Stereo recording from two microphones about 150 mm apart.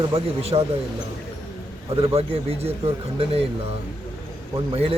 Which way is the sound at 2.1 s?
40° right (ahead or behind).